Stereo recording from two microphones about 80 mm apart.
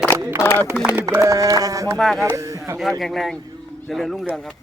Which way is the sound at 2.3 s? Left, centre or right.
Right.